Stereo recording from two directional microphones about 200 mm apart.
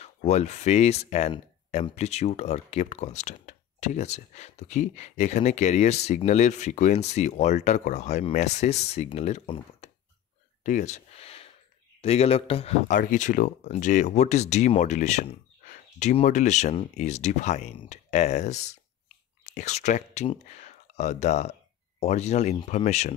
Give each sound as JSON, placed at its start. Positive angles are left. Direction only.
{"t": 0.0, "sound": "speech", "side_deg": 35}